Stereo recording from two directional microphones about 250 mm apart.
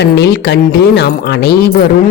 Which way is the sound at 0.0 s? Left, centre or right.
Left.